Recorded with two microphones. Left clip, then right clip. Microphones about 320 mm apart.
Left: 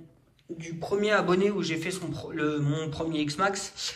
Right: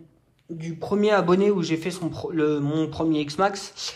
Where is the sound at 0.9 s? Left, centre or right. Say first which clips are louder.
Right 4 dB; centre.